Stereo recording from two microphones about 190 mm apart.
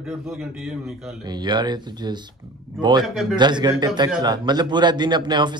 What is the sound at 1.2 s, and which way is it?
Speech, 25° right (ahead or behind).